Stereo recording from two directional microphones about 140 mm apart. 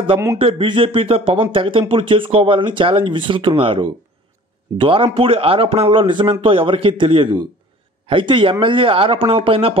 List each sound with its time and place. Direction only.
0.4 s speech: 40° right (ahead or behind)